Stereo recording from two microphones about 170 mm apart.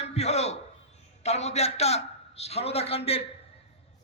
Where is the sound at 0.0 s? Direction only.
40° left (ahead or behind).